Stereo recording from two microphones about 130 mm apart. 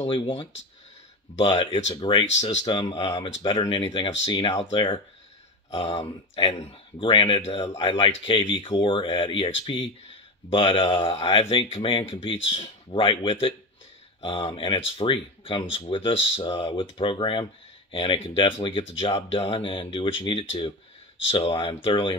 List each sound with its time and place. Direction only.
2.0 s speech: 40° left (ahead or behind)